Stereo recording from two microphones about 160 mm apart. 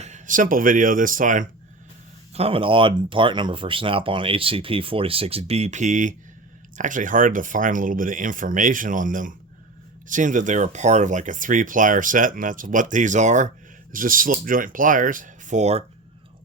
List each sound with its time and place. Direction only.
0.0 s speech: 50° right (ahead or behind)
2.3 s speech: 35° right (ahead or behind)
13.9 s speech: 60° right (ahead or behind)